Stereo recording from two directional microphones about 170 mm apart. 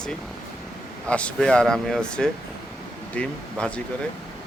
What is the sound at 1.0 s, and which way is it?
A man's voice, 5° left (ahead or behind).